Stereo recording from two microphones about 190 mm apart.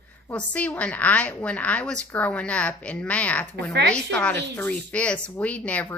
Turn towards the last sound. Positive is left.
turn(degrees=5)  # may be behind; listen again after turning